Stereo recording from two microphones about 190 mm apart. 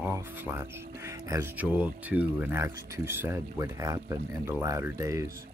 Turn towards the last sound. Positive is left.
turn(degrees=-15)  # may be behind; listen again after turning